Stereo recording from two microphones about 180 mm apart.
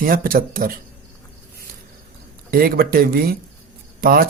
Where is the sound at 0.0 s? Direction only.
50° right (ahead or behind).